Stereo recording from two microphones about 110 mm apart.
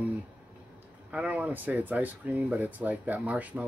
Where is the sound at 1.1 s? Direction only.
10° right (ahead or behind).